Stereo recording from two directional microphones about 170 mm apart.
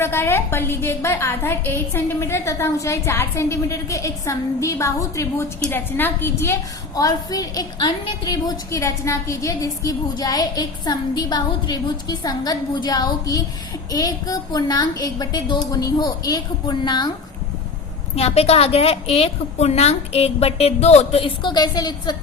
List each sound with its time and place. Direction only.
0.0 s a woman's voice: 15° left (ahead or behind)
18.2 s a woman's voice: 35° left (ahead or behind)